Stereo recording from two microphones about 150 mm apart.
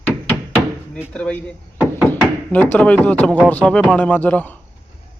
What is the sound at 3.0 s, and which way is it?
A man's voice, 10° left (ahead or behind).